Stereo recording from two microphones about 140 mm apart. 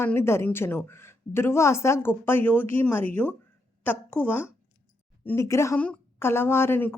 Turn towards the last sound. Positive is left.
turn(degrees=15)  # may be behind; listen again after turning